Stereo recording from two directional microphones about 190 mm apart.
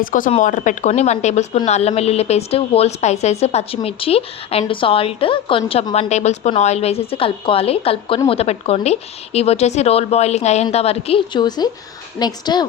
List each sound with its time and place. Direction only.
0.0 s speech: 45° left (ahead or behind); by 12.6 s 20° left (ahead or behind)